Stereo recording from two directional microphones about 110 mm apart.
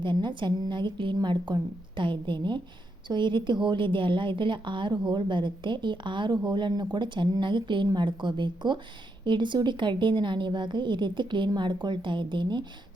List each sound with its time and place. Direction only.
0.0 s a woman's voice: 45° right (ahead or behind)